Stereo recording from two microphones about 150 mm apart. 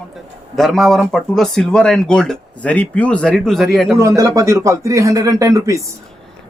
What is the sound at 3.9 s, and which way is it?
Speech, 20° right (ahead or behind).